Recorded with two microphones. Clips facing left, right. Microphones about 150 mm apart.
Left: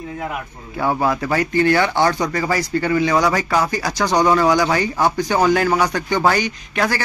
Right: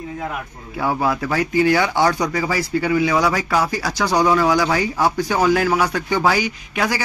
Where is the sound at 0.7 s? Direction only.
Centre (ahead or behind).